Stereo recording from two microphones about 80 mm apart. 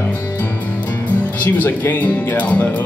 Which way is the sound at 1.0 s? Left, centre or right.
Centre.